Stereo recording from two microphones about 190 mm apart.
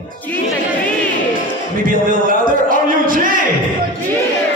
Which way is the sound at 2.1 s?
45° right (ahead or behind).